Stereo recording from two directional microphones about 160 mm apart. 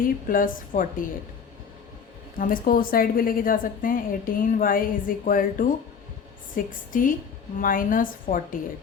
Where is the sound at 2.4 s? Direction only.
60° left (ahead or behind).